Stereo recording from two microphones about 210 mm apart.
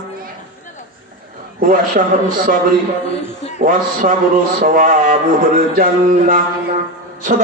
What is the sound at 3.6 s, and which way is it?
Speech, 40° right (ahead or behind).